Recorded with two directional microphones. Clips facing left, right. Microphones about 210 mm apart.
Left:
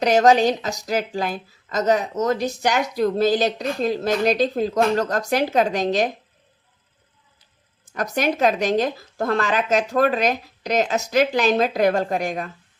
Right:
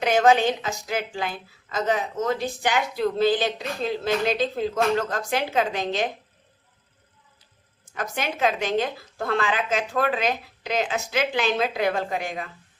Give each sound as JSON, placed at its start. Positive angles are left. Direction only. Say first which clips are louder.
{"t": 0.0, "sound": "a woman's voice", "louder": "left 3 dB", "side_deg": 40}
{"t": 7.9, "sound": "a woman's voice", "louder": "left 7 dB", "side_deg": 40}